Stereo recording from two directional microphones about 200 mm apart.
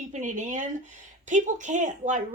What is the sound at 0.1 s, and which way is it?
A woman's voice, 40° right (ahead or behind).